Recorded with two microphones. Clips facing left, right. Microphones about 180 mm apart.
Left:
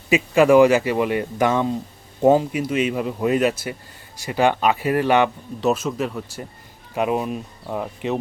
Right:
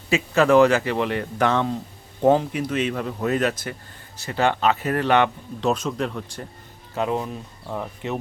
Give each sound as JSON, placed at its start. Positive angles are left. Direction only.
{"t": 0.1, "sound": "speech", "side_deg": 10}